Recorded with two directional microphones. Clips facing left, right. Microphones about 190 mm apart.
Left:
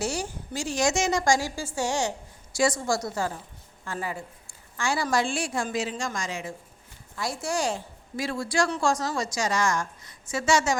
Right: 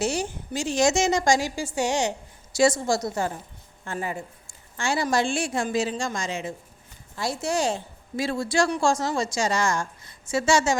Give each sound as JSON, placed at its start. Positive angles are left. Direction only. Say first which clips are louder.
{"t": 0.0, "sound": "a woman's voice", "louder": "right 4 dB", "side_deg": -20}